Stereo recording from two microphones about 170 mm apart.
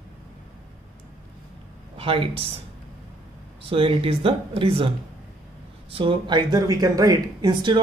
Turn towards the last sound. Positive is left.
turn(degrees=-25)  # may be behind; listen again after turning